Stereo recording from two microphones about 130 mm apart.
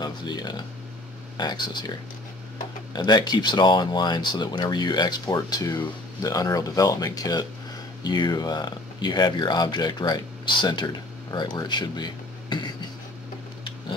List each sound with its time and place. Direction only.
0.0 s speech: 35° left (ahead or behind)